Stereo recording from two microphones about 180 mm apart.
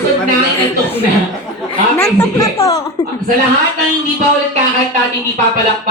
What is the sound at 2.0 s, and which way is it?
Speech, 15° left (ahead or behind).